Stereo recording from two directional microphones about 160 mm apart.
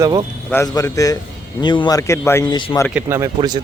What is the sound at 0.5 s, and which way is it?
Speech, 20° left (ahead or behind).